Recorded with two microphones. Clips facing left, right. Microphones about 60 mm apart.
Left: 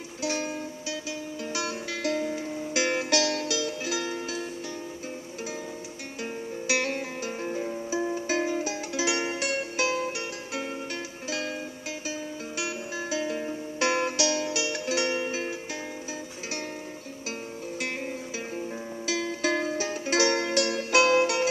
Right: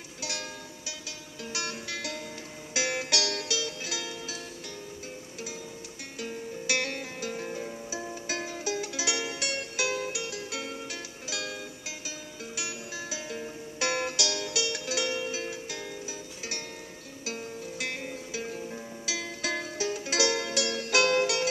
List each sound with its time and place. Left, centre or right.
0.2 s music: left
2.0 s music: left
6.2 s music: left
12.5 s music: left
13.5 s music: left
17.3 s music: left
19.0 s music: left